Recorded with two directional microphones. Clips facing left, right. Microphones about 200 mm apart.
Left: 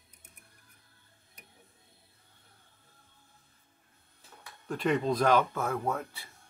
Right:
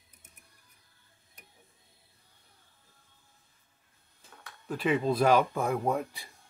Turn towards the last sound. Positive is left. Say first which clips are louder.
# right 3 dB
turn(degrees=-15)  # may be behind; listen again after turning